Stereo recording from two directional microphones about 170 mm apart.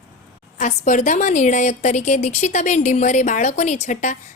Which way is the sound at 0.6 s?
45° left (ahead or behind).